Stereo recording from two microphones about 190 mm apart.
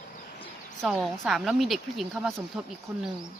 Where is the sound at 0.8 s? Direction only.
Centre (ahead or behind).